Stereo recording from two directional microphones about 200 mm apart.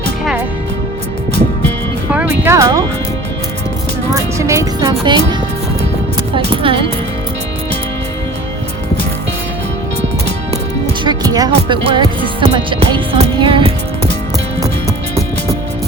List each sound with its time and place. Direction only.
2.4 s music: 15° right (ahead or behind)
4.1 s music: 15° right (ahead or behind)
6.5 s music: 25° right (ahead or behind)
11.0 s speech: 20° right (ahead or behind)
12.5 s music: 25° right (ahead or behind)